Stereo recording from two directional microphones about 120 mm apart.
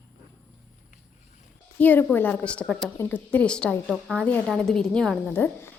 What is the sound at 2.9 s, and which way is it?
A woman's voice, 15° left (ahead or behind).